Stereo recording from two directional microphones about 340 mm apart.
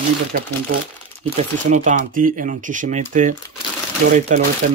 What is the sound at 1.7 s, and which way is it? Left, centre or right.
Speech, right.